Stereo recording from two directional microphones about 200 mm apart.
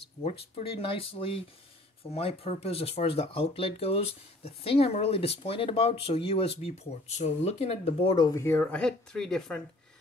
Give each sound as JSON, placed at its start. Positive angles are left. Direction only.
{"t": 0.2, "sound": "speech", "side_deg": 30}